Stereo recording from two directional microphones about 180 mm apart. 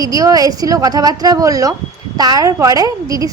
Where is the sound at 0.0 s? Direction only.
20° right (ahead or behind).